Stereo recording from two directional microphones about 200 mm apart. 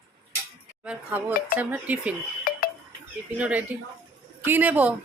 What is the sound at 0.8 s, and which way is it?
Speech, 10° right (ahead or behind).